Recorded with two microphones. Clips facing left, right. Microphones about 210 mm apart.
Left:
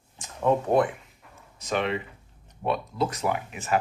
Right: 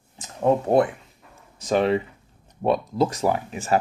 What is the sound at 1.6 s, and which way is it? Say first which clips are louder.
Speech: right 7 dB; 35° right (ahead or behind).